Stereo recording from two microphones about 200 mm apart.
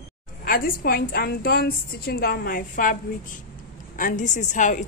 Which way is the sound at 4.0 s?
40° left (ahead or behind).